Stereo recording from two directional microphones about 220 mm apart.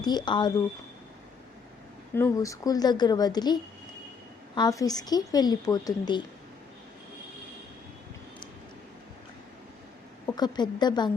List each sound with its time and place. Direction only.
0.0 s a woman's voice: 20° left (ahead or behind)
2.1 s a woman's voice: 15° left (ahead or behind)
10.2 s a woman's voice: 20° left (ahead or behind)